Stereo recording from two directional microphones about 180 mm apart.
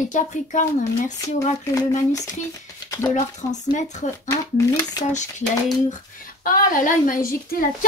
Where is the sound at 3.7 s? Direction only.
40° left (ahead or behind).